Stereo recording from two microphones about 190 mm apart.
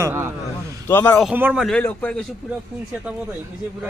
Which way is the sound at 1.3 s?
10° right (ahead or behind).